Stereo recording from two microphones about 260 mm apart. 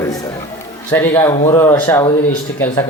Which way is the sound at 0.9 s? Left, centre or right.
Centre.